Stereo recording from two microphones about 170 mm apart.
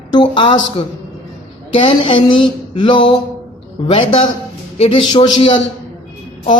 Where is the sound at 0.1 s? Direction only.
30° left (ahead or behind).